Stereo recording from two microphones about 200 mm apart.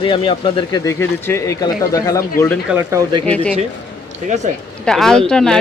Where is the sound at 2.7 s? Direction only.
10° right (ahead or behind).